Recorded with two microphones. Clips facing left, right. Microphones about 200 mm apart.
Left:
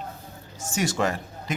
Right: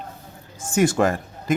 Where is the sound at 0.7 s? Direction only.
50° right (ahead or behind).